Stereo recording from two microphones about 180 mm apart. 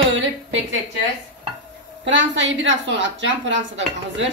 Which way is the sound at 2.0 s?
90° right.